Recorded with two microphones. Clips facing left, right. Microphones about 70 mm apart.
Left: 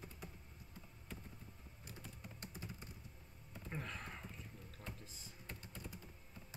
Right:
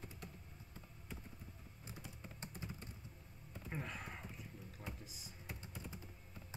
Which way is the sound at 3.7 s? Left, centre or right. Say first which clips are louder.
Right 1 dB; centre.